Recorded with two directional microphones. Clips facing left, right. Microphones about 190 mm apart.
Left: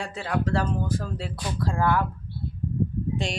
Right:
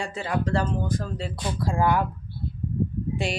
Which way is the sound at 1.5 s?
15° right (ahead or behind).